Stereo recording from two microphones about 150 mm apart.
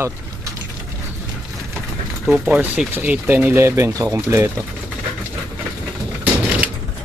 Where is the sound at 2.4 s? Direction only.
10° right (ahead or behind).